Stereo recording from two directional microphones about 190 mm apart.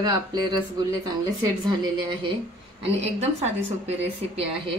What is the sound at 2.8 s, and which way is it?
Speech, 35° right (ahead or behind).